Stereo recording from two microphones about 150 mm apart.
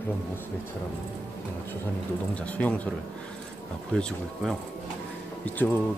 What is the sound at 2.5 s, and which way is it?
Speech, 10° left (ahead or behind).